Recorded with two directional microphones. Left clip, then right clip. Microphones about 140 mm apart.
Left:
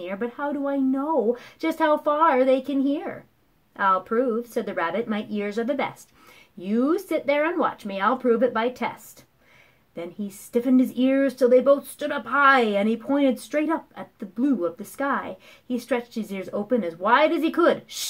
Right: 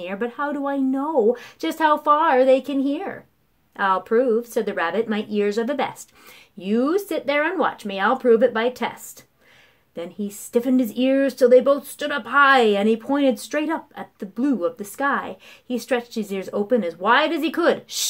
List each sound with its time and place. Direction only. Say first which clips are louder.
0.0 s speech: right 3 dB; 30° right (ahead or behind)